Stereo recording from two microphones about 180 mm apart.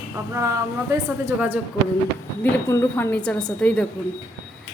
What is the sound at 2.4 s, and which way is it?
A woman's voice, 15° left (ahead or behind).